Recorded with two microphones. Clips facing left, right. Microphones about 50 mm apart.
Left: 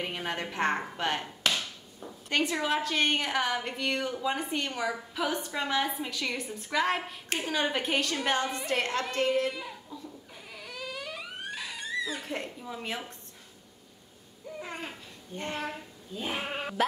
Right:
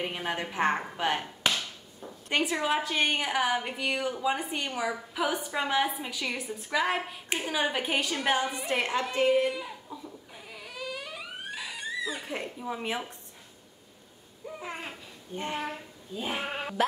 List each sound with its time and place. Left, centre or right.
0.0 s a woman's voice: centre
1.5 s a sound: centre
2.2 s a woman's voice: centre
10.5 s a sound: centre
12.6 s a woman's voice: centre
14.6 s babbling: centre
15.3 s speech: centre